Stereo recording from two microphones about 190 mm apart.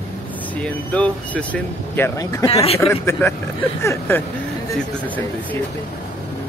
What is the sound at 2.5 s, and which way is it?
Speech, 30° left (ahead or behind).